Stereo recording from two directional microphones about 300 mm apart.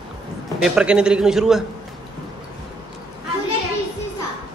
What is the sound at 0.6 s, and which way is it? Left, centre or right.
A man's voice, centre.